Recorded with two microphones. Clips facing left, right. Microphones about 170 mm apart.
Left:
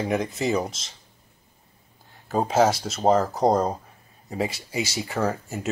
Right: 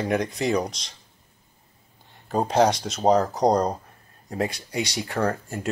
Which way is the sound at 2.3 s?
5° left (ahead or behind).